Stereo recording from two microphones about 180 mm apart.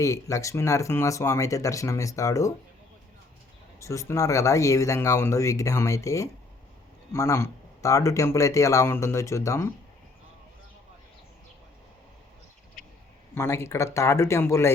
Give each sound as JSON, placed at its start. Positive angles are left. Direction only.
{"t": 0.0, "sound": "speech", "side_deg": 15}
{"t": 3.8, "sound": "speech", "side_deg": 15}
{"t": 13.3, "sound": "speech", "side_deg": 15}